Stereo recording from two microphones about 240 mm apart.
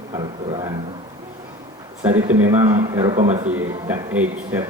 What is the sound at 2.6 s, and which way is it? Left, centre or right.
Speech, right.